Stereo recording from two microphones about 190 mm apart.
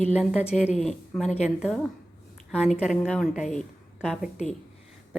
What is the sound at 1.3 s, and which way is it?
Speech, 35° left (ahead or behind).